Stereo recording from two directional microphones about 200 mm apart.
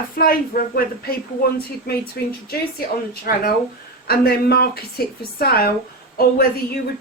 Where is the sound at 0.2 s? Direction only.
45° left (ahead or behind).